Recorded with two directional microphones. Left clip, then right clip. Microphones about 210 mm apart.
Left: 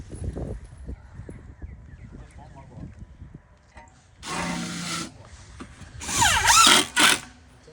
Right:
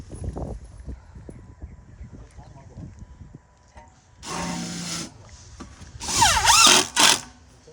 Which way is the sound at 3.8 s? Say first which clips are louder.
Even; 60° right (ahead or behind).